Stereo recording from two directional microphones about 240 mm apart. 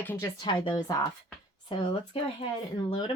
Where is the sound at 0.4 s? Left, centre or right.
Centre.